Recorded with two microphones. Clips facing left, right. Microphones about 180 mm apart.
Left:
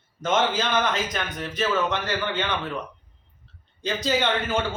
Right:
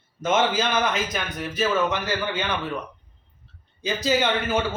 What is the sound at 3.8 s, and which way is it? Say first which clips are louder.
Speech: right 1 dB; 5° right (ahead or behind).